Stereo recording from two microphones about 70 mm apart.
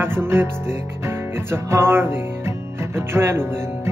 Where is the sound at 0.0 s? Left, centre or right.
Right.